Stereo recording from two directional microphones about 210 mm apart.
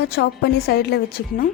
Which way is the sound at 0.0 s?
50° left (ahead or behind).